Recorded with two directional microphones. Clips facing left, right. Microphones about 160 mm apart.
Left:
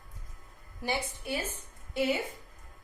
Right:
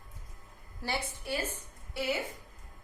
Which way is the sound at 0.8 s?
15° left (ahead or behind).